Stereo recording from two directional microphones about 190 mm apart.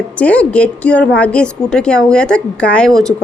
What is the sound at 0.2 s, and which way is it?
A woman's voice, 5° left (ahead or behind).